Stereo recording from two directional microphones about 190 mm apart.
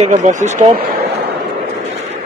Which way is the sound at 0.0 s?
40° right (ahead or behind).